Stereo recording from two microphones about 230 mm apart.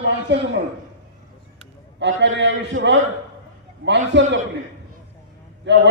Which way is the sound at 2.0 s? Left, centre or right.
Right.